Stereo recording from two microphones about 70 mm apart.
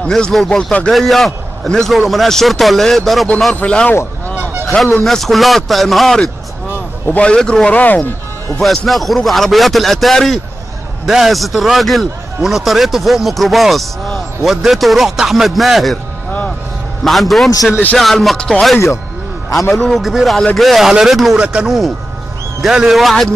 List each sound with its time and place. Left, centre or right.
0.0 s a man's voice: centre
3.5 s a man's voice: centre
5.0 s a man's voice: centre; by 8.1 s left
8.6 s a man's voice: centre
17.0 s a man's voice: centre
21.4 s speech: centre
21.6 s a man's voice: centre